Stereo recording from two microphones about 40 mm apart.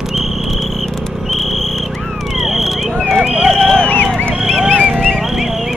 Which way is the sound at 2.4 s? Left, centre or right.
Centre.